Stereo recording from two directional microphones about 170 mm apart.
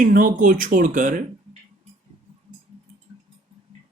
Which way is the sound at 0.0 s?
50° right (ahead or behind).